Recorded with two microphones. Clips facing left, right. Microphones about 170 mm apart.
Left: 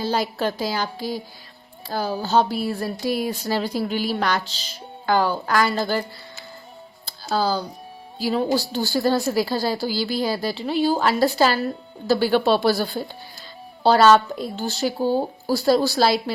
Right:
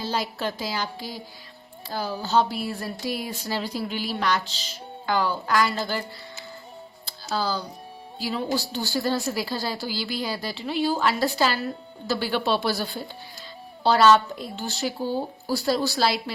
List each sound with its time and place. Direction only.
0.0 s a woman's voice: 45° left (ahead or behind)
7.3 s a woman's voice: 40° left (ahead or behind)